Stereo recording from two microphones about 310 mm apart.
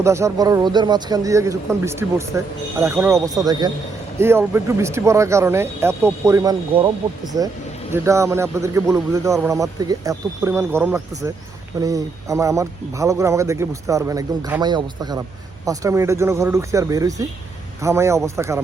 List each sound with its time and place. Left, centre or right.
0.0 s speech: centre
7.9 s speech: centre